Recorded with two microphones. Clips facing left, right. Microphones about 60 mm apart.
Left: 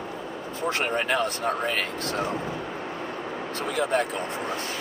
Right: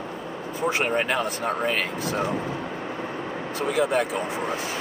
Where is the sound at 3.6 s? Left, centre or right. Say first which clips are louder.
Right 3 dB; centre.